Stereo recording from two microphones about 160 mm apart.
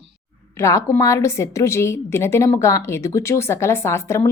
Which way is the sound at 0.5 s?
15° left (ahead or behind).